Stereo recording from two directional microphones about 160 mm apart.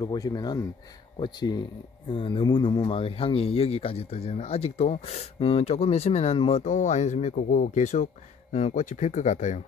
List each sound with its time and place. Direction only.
0.0 s speech: 25° left (ahead or behind); by 9.6 s 50° left (ahead or behind)